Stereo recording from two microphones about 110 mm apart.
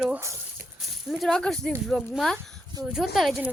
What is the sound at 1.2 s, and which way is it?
Speech, 5° left (ahead or behind).